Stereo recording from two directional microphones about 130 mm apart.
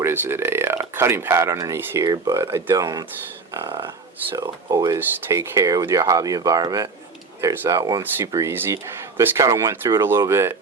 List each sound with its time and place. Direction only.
0.0 s speech: 15° right (ahead or behind)